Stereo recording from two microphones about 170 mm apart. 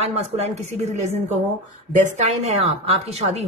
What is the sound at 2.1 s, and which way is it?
Speech, 40° right (ahead or behind).